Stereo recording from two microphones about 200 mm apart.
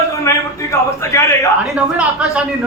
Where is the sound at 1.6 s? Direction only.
5° right (ahead or behind).